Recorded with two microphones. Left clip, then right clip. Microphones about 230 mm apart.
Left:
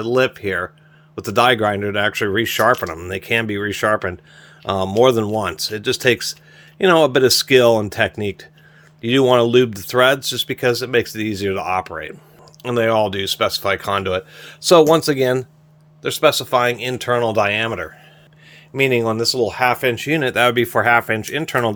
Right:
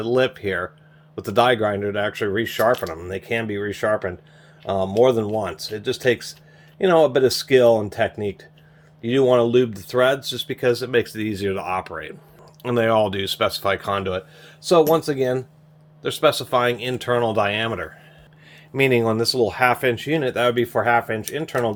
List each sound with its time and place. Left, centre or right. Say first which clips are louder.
0.0 s speech: left 3 dB; left
12.6 s speech: left 2 dB; centre; by 15.4 s left
16.0 s speech: left 3 dB; left
18.7 s speech: left 1 dB; centre; by 21.8 s left